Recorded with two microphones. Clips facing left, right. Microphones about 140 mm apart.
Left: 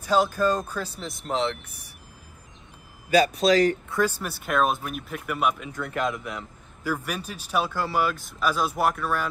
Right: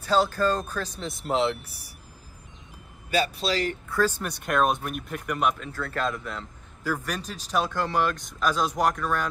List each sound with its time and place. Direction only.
0.0 s speech: 10° left (ahead or behind)
1.0 s speech: centre (ahead or behind)
1.6 s speech: 35° right (ahead or behind)
3.1 s speech: 40° left (ahead or behind)
3.9 s speech: 10° left (ahead or behind)
5.7 s a man's voice: 15° left (ahead or behind)